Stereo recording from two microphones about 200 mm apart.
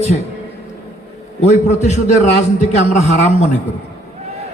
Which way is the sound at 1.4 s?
35° left (ahead or behind).